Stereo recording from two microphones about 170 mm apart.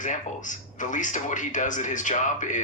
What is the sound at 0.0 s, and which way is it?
Speech, 50° left (ahead or behind).